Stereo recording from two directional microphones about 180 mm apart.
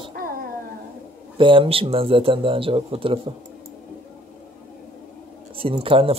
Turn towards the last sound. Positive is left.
turn(degrees=-30)  # may be behind; listen again after turning